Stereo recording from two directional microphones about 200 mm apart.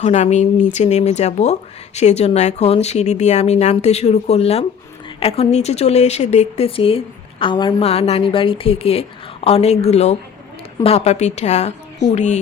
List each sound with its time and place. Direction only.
0.0 s speech: 35° left (ahead or behind)